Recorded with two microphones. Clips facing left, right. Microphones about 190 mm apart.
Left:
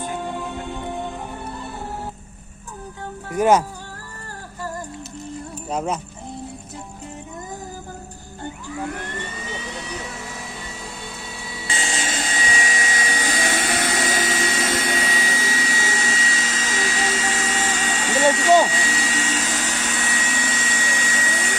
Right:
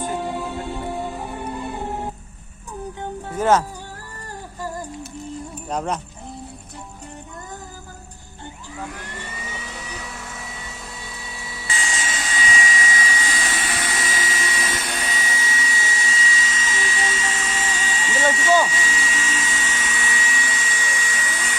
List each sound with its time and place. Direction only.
0.2 s music: 5° right (ahead or behind)
3.3 s speech: 15° left (ahead or behind)
5.6 s speech: 5° left (ahead or behind)
10.8 s a sound: centre (ahead or behind)
11.7 s vacuum cleaner: 30° left (ahead or behind)
12.0 s vacuum cleaner: 50° left (ahead or behind); by 21.3 s 65° left (ahead or behind)